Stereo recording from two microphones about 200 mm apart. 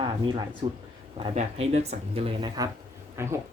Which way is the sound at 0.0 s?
25° right (ahead or behind).